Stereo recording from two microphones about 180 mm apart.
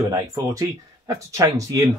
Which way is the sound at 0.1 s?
20° right (ahead or behind).